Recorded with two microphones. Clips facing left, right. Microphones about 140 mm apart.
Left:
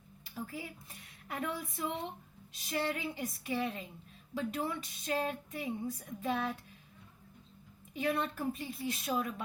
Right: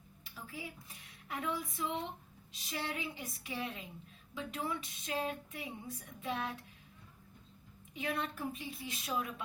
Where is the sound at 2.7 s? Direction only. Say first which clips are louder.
Left 5 dB; 45° left (ahead or behind).